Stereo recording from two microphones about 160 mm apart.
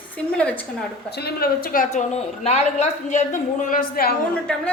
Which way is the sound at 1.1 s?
85° left.